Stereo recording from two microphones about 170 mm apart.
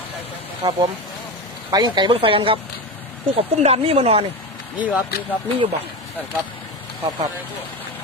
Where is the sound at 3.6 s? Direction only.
35° right (ahead or behind).